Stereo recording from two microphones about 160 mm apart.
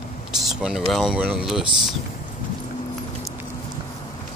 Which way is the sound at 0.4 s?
5° right (ahead or behind).